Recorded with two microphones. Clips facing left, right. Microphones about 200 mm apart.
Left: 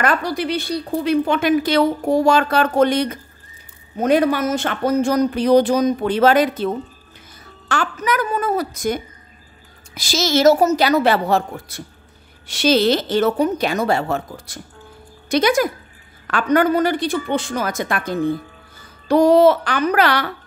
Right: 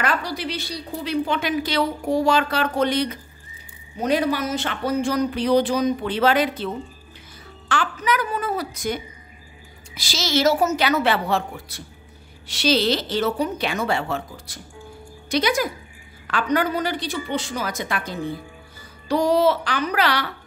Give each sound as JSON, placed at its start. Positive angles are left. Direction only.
{"t": 0.0, "sound": "a woman's voice", "side_deg": 50}